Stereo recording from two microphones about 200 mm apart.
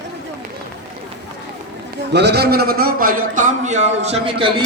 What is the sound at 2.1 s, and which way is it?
A man's voice, 55° right (ahead or behind).